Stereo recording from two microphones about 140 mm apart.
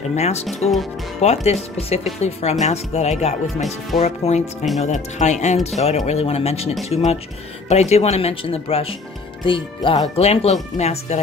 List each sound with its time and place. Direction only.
0.1 s speech: 50° left (ahead or behind)
0.5 s speech: centre (ahead or behind)
1.2 s speech: 50° left (ahead or behind); by 10.0 s 35° left (ahead or behind)
10.1 s speech: 45° left (ahead or behind)